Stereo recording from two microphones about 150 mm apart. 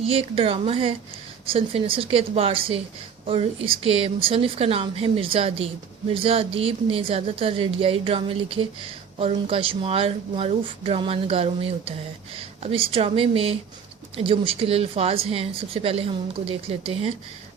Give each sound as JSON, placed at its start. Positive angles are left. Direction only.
{"t": 0.0, "sound": "speech", "side_deg": -40}